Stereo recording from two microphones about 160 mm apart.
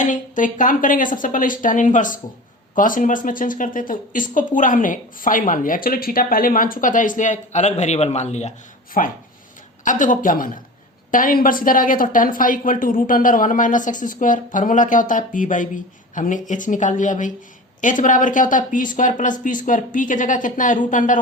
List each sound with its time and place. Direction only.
0.0 s a woman's voice: 55° left (ahead or behind)
8.9 s a woman's voice: 60° left (ahead or behind)